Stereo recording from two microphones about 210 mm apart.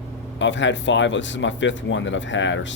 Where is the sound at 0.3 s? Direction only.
60° left (ahead or behind).